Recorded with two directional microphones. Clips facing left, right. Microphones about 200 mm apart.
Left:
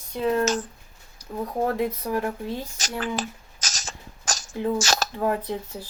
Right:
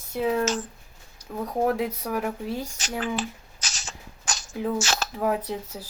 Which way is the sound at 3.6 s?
40° left (ahead or behind).